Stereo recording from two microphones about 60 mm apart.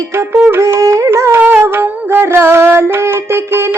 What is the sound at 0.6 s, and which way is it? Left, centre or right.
Carnatic music, right.